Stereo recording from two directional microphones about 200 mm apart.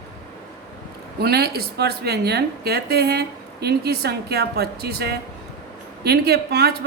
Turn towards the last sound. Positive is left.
turn(degrees=-55)  # may be behind; listen again after turning